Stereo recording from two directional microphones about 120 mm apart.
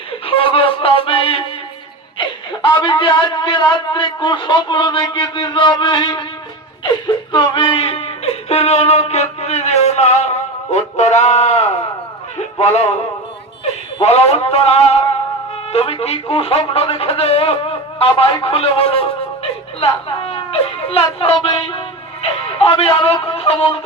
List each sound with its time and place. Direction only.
0.3 s music: 50° left (ahead or behind)
2.1 s speech: 45° left (ahead or behind)
7.3 s music: 45° left (ahead or behind); by 10.2 s 65° left (ahead or behind)
10.7 s speech: 70° left (ahead or behind)
12.4 s a sound: 65° left (ahead or behind)
14.0 s a man's voice: 60° left (ahead or behind)
20.2 s a sound: 55° left (ahead or behind)